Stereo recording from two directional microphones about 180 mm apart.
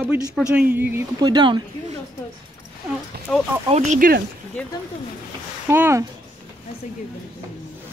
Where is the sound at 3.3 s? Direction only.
Centre (ahead or behind).